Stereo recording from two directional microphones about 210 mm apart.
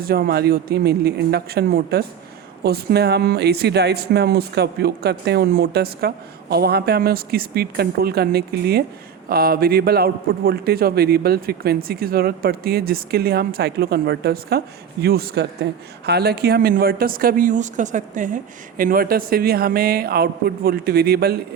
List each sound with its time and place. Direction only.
0.0 s speech: 45° right (ahead or behind)